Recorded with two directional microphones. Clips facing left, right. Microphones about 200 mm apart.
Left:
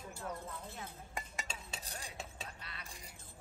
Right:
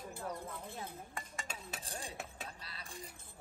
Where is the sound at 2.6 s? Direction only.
30° right (ahead or behind).